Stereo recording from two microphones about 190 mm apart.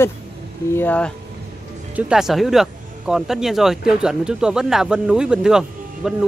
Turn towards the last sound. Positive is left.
turn(degrees=-5)  # may be behind; listen again after turning